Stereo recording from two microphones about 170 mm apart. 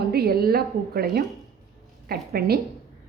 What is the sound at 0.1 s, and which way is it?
A woman's voice, 65° right (ahead or behind).